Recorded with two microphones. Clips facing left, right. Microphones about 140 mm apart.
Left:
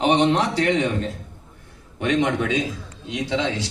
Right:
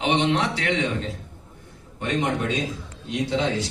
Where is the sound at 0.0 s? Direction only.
40° left (ahead or behind).